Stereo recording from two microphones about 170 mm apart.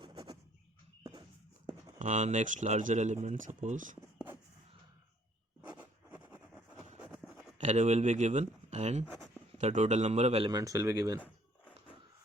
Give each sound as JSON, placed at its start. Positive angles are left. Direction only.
{"t": 0.0, "sound": "bird", "side_deg": -25}
{"t": 2.0, "sound": "speech", "side_deg": -45}
{"t": 5.7, "sound": "writing", "side_deg": -10}
{"t": 6.3, "sound": "a sound", "side_deg": -10}
{"t": 7.6, "sound": "a man's voice", "side_deg": -45}
{"t": 10.5, "sound": "speech", "side_deg": -20}